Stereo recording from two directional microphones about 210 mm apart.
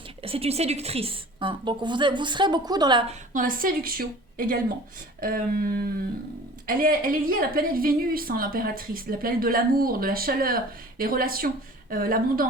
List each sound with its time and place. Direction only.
0.2 s a woman's voice: 25° right (ahead or behind)
3.1 s a woman's voice: 40° right (ahead or behind)